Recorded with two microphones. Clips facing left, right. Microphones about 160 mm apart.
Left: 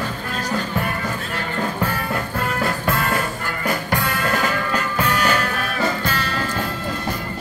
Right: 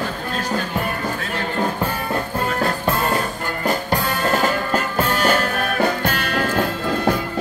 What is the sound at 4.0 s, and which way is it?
Music, 35° right (ahead or behind).